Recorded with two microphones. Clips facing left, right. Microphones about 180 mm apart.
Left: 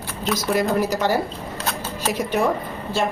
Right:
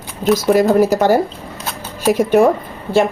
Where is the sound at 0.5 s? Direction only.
50° right (ahead or behind).